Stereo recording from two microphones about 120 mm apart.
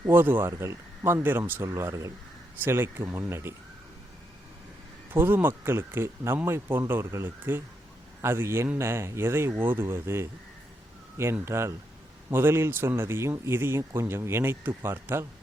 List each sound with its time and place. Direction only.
0.0 s a man's voice: 15° right (ahead or behind)
5.1 s a man's voice: 15° right (ahead or behind)